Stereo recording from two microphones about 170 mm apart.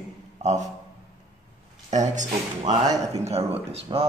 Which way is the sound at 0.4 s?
40° right (ahead or behind).